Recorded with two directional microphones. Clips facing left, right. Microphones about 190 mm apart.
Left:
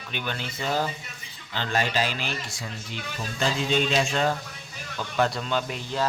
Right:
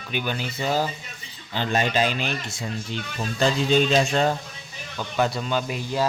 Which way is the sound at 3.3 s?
35° right (ahead or behind).